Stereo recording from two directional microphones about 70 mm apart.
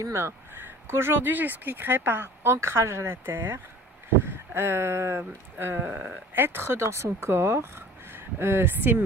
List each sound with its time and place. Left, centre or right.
0.0 s speech: right